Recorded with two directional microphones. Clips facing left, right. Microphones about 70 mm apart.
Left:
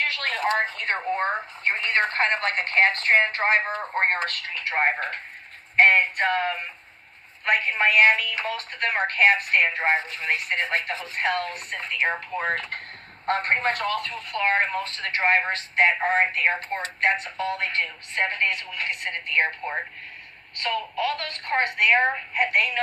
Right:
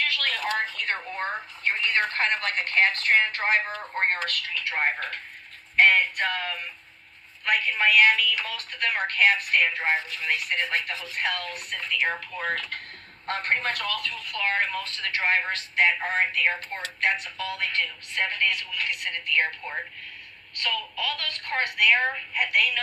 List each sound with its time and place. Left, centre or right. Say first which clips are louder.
0.0 s speech: left 2 dB; left